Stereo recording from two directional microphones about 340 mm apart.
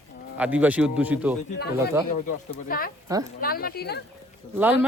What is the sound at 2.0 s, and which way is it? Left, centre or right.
Speech, left.